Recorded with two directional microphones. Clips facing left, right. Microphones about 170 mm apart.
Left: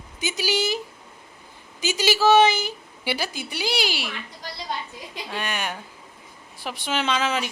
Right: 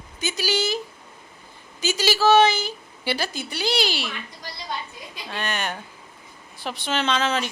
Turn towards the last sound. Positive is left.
turn(degrees=10)  # may be behind; listen again after turning